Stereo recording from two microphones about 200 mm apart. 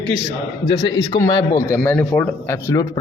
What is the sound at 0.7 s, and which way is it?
A man's voice, 20° left (ahead or behind).